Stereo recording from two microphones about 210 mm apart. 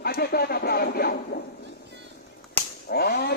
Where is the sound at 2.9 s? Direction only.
50° left (ahead or behind).